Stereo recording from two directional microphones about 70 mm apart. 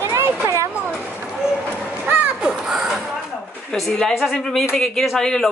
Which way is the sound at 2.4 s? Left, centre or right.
Centre.